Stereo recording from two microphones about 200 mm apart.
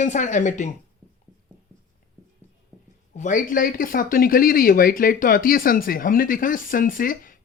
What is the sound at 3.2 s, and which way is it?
Speech, 40° left (ahead or behind).